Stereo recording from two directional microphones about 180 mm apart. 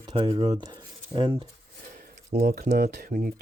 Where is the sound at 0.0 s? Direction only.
25° right (ahead or behind).